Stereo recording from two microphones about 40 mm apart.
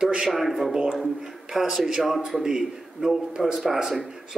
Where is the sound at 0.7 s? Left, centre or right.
Centre.